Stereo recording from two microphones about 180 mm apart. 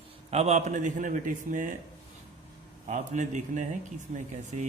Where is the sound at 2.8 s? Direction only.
40° right (ahead or behind).